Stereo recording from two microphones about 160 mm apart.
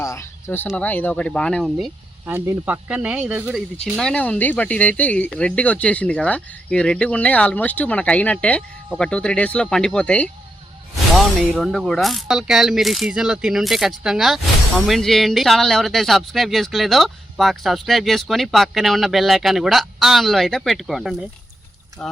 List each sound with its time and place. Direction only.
0.0 s speech: 15° left (ahead or behind)
2.2 s speech: 15° right (ahead or behind); by 22.1 s 5° left (ahead or behind)